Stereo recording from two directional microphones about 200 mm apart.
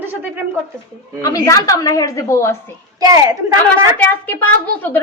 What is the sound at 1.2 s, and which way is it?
A woman's voice, 15° left (ahead or behind).